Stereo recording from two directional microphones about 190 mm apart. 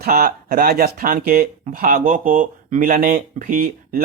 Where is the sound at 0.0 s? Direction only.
50° right (ahead or behind).